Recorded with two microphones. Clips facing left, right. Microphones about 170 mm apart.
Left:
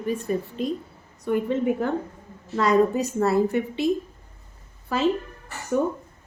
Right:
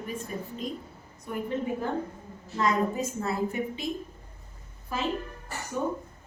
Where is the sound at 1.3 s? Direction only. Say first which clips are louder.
Left 8 dB; 80° left.